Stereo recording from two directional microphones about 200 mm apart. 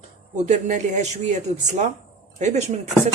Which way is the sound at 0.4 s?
35° right (ahead or behind).